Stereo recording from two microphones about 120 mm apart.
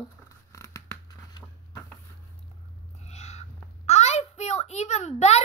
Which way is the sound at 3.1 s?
65° left (ahead or behind).